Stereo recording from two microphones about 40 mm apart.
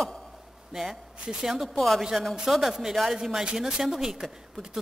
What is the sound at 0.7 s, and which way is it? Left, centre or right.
A woman's voice, centre.